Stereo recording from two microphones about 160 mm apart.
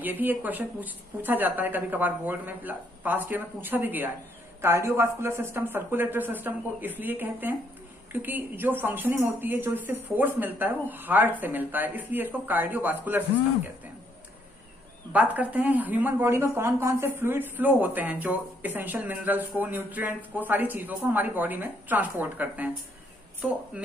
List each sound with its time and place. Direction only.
0.0 s speech: 10° right (ahead or behind)
15.1 s speech: 10° right (ahead or behind)